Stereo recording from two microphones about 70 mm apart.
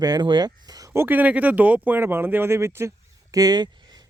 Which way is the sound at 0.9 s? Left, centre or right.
Right.